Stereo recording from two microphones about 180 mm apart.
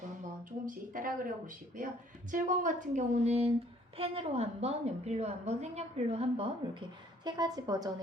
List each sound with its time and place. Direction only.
0.2 s a woman's voice: 50° right (ahead or behind); by 6.8 s 30° right (ahead or behind)
7.3 s a woman's voice: 20° right (ahead or behind)